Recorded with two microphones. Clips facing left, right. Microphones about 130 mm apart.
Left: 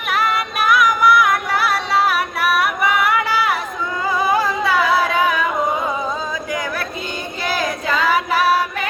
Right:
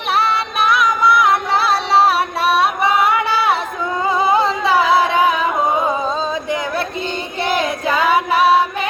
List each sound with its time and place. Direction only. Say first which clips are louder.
0.1 s music: right 2 dB; 30° right (ahead or behind)
4.2 s carnatic music: right 2 dB; 25° right (ahead or behind)
7.5 s child singing: right 3 dB; 25° right (ahead or behind)
7.9 s female singing: right 3 dB; 20° right (ahead or behind)